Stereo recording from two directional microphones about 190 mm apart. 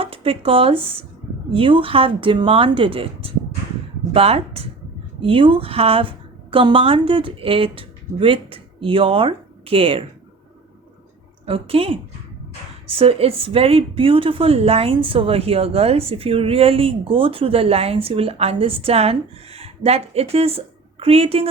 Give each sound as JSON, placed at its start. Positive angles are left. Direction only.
{"t": 0.0, "sound": "a woman's voice", "side_deg": -30}
{"t": 11.4, "sound": "a woman's voice", "side_deg": -30}